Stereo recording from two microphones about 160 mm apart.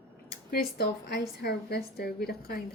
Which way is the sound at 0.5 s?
80° left.